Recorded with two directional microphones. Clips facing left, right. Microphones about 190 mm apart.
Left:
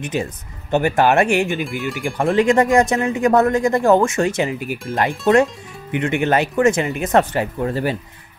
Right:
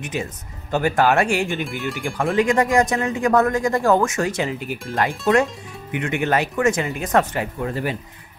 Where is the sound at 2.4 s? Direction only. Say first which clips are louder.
Left 3 dB; 30° left (ahead or behind).